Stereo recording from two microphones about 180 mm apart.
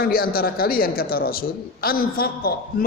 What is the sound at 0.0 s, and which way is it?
A man's voice, 55° left (ahead or behind).